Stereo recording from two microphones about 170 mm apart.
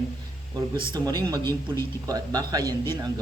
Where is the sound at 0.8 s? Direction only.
25° right (ahead or behind).